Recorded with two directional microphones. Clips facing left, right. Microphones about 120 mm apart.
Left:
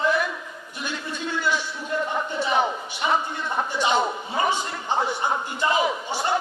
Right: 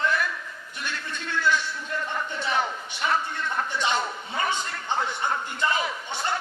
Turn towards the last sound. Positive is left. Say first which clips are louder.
# left 6 dB
turn(degrees=15)  # may be behind; listen again after turning